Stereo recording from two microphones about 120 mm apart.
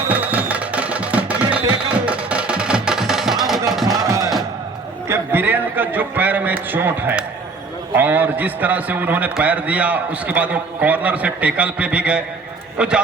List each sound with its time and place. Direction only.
0.1 s music: 15° right (ahead or behind)
5.0 s a man's voice: 20° right (ahead or behind)